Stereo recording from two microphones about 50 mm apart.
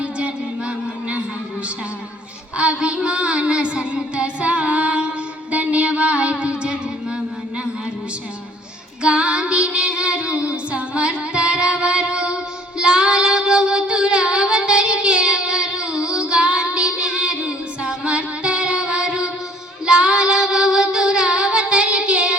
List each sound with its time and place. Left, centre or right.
2.6 s child singing: right
9.0 s music: right
12.8 s child singing: centre